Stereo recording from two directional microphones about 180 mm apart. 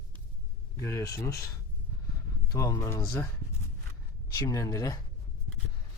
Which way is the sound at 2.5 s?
20° left (ahead or behind).